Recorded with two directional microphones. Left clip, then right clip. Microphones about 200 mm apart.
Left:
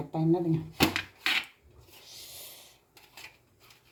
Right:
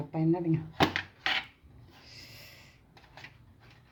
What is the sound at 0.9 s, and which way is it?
Wood, centre (ahead or behind).